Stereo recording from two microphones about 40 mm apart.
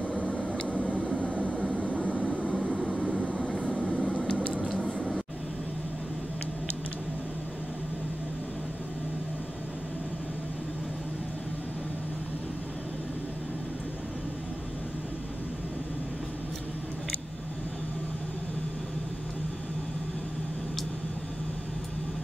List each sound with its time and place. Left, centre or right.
0.3 s vehicle: left
2.3 s vehicle: right
3.9 s a sound: left